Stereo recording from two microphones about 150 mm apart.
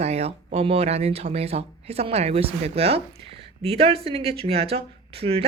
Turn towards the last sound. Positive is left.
turn(degrees=-40)  # may be behind; listen again after turning